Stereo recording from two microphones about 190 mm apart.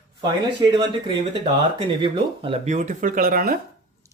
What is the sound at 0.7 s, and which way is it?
Speech, 25° right (ahead or behind).